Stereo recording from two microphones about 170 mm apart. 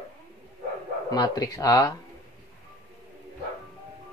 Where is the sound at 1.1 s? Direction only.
20° left (ahead or behind).